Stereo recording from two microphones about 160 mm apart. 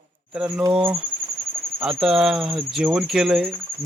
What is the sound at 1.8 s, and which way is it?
Cricket, centre (ahead or behind).